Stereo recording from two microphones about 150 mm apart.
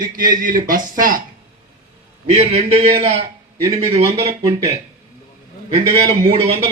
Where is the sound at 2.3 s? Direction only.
45° right (ahead or behind).